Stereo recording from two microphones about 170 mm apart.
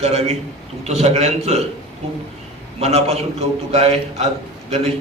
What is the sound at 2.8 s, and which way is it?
A man's voice, 40° right (ahead or behind).